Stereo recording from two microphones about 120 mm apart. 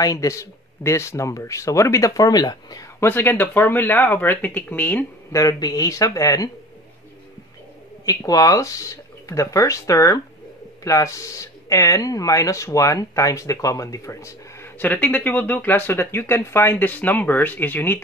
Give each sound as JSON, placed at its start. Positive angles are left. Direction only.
{"t": 0.0, "sound": "speech", "side_deg": 30}
{"t": 3.1, "sound": "speech", "side_deg": 15}
{"t": 5.3, "sound": "speech", "side_deg": 30}
{"t": 8.0, "sound": "speech", "side_deg": 30}